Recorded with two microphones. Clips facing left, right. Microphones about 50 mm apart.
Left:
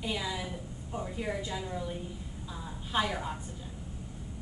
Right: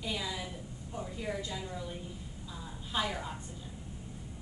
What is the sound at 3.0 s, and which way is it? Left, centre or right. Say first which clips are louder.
Speech: left 3 dB; centre.